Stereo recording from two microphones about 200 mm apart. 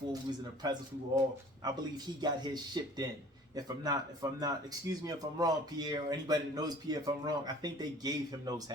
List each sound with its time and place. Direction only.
0.1 s speech: 20° right (ahead or behind)